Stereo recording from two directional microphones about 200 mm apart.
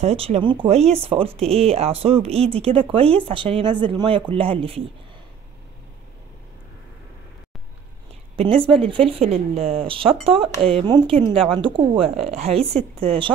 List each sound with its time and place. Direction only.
0.0 s speech: 30° right (ahead or behind)
8.4 s speech: 30° right (ahead or behind)